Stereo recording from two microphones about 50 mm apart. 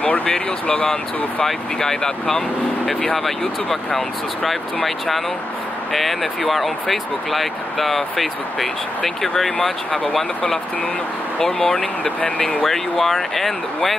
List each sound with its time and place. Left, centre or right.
0.0 s speech: left
1.4 s speech: centre
11.3 s speech: centre
12.6 s speech: centre